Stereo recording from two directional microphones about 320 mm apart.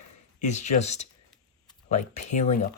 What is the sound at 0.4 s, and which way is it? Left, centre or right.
Speech, left.